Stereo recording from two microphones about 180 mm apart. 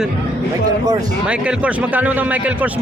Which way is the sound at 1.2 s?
5° right (ahead or behind).